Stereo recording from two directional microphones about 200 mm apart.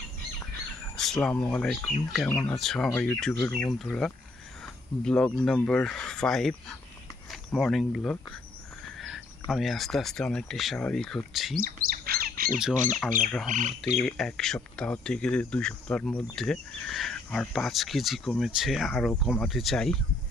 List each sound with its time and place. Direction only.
0.9 s a sound: 5° left (ahead or behind)
1.4 s speech: 5° left (ahead or behind)
3.7 s speech: centre (ahead or behind)
11.6 s bird: 45° right (ahead or behind)
13.5 s speech: 40° right (ahead or behind)
14.0 s speech: 5° left (ahead or behind)